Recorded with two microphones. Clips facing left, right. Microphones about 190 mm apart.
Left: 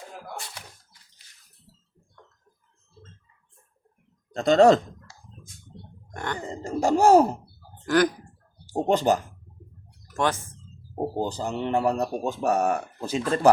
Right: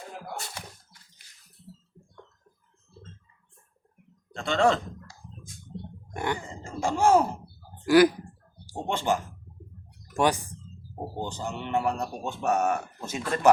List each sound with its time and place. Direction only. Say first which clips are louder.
4.4 s speech: left 7 dB; 40° left (ahead or behind)
6.1 s grunt: right 2 dB; 10° right (ahead or behind)
6.4 s a man's voice: left 6 dB; 40° left (ahead or behind)
7.9 s speech: right 3 dB; 10° right (ahead or behind)
8.7 s a man's voice: left 6 dB; 40° left (ahead or behind)
10.2 s speech: right 1 dB; 15° right (ahead or behind)
11.2 s a man's voice: left 4 dB; 35° left (ahead or behind)